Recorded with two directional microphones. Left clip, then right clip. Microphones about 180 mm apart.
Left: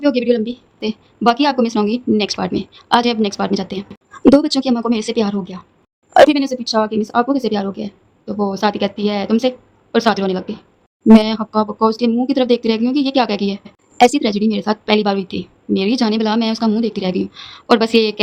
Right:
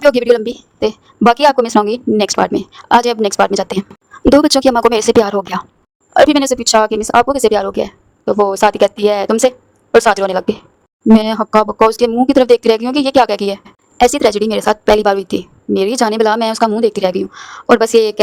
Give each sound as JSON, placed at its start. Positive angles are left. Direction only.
{"t": 0.0, "sound": "a woman's voice", "side_deg": -55}
{"t": 3.8, "sound": "a woman's voice", "side_deg": 0}
{"t": 4.4, "sound": "speech", "side_deg": -65}
{"t": 6.1, "sound": "speech", "side_deg": 0}
{"t": 6.4, "sound": "a woman's voice", "side_deg": -65}